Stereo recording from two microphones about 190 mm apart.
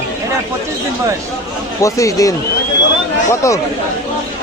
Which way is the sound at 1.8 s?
15° left (ahead or behind).